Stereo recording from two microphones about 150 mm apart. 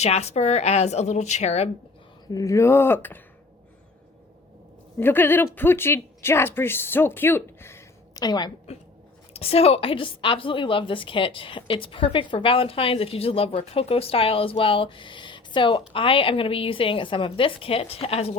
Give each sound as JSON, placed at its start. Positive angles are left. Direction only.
{"t": 0.0, "sound": "a woman's voice", "side_deg": 45}
{"t": 2.3, "sound": "speech", "side_deg": 20}
{"t": 4.9, "sound": "speech", "side_deg": 15}
{"t": 9.3, "sound": "a woman's voice", "side_deg": 40}